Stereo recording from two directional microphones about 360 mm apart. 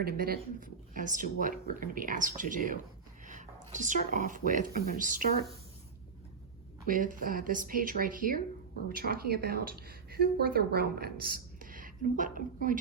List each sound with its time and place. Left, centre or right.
0.0 s a woman's voice: right
6.8 s a woman's voice: right